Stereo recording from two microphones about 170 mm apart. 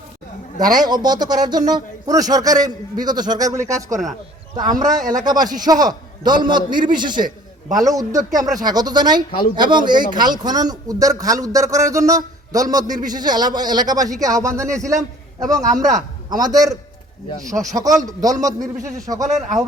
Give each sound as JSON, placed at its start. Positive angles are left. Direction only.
{"t": 0.6, "sound": "a man's voice", "side_deg": -25}
{"t": 5.2, "sound": "a man's voice", "side_deg": -25}
{"t": 19.2, "sound": "speech", "side_deg": -45}